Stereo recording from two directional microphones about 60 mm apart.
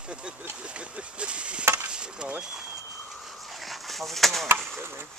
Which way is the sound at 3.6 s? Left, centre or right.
Centre.